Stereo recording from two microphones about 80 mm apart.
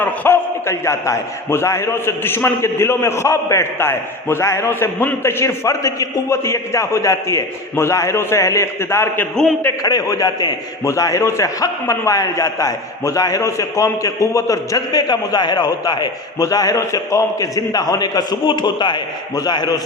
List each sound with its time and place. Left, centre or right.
0.0 s a man's voice: left
0.6 s a man's voice: left
9.8 s a man's voice: left
16.8 s a man's voice: left
18.4 s a man's voice: left